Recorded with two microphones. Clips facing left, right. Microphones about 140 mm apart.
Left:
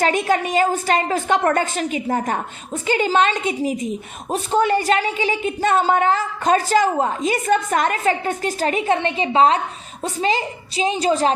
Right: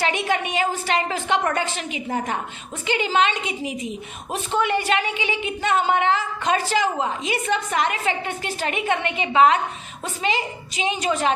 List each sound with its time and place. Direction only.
0.0 s a woman's voice: 45° left (ahead or behind)